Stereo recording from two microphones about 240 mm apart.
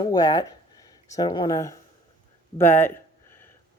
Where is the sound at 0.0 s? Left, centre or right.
Centre.